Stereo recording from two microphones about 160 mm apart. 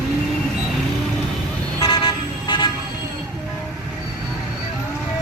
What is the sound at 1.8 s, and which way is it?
Vehicle, 25° left (ahead or behind).